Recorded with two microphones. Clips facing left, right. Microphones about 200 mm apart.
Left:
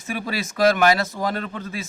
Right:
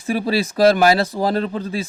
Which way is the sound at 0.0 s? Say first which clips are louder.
Right 8 dB; 35° right (ahead or behind).